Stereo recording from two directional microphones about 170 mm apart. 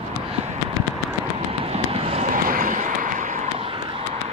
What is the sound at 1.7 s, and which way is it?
Vehicle, 35° right (ahead or behind).